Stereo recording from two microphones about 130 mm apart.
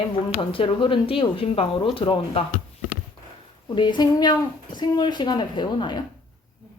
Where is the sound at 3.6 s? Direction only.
35° left (ahead or behind).